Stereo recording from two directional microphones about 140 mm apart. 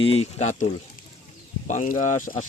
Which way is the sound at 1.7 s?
65° left (ahead or behind).